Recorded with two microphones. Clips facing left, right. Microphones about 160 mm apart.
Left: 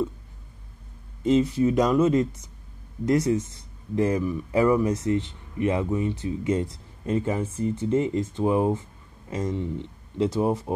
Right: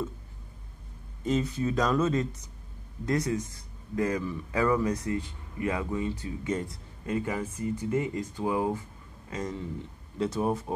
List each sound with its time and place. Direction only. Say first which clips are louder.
1.2 s speech: left 7 dB; 25° left (ahead or behind)